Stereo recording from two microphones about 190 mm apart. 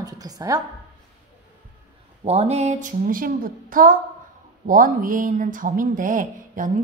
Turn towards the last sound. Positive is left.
turn(degrees=-45)  # may be behind; listen again after turning